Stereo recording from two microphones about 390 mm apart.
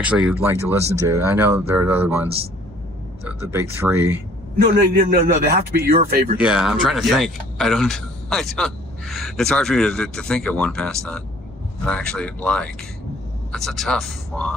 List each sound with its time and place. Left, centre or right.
0.0 s speech: centre
3.2 s speech: centre
4.5 s a man's voice: right
6.3 s speech: centre